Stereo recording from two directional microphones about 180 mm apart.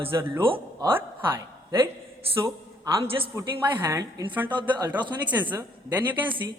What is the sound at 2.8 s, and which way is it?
A man's voice, 15° right (ahead or behind).